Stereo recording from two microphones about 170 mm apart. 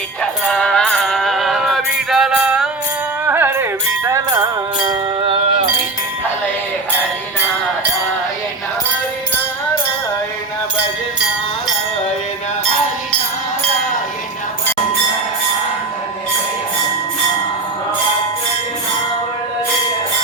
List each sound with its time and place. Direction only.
0.2 s music: 5° left (ahead or behind); by 5.6 s 30° right (ahead or behind)